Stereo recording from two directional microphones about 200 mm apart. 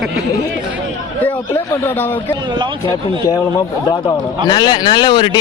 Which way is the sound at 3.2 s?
20° left (ahead or behind).